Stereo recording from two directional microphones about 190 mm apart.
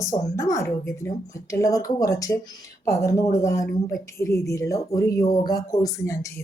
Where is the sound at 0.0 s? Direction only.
15° left (ahead or behind).